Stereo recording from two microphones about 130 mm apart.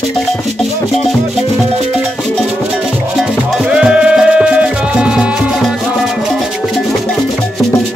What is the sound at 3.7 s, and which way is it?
Music, 5° right (ahead or behind).